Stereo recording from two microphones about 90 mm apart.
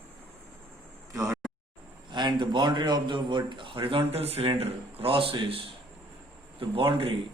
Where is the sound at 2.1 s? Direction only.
55° right (ahead or behind); by 5.6 s 80° right.